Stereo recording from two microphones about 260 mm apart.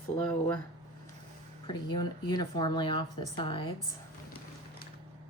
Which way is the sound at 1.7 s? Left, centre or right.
Centre.